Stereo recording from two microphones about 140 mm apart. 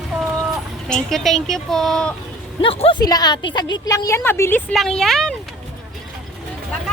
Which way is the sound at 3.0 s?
30° left (ahead or behind).